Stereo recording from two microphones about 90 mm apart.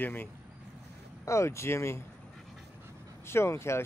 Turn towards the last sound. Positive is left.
turn(degrees=30)  # may be behind; listen again after turning